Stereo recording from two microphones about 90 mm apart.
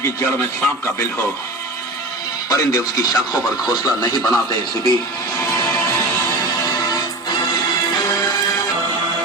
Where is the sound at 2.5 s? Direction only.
40° left (ahead or behind).